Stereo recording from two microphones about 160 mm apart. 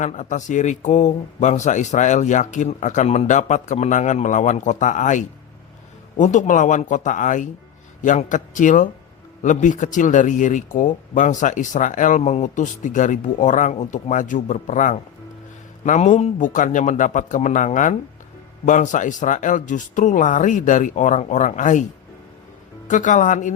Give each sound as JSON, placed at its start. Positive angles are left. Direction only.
{"t": 0.0, "sound": "speech", "side_deg": 50}
{"t": 22.9, "sound": "speech", "side_deg": 50}